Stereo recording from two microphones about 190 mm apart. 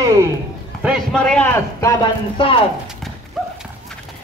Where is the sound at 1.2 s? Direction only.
5° left (ahead or behind).